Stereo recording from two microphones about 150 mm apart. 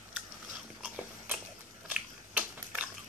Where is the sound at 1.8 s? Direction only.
10° right (ahead or behind).